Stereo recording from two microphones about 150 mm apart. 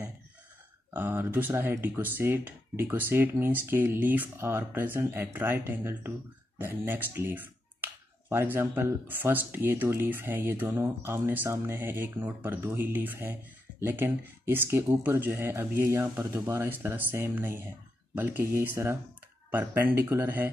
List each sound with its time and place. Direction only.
0.9 s speech: 15° right (ahead or behind)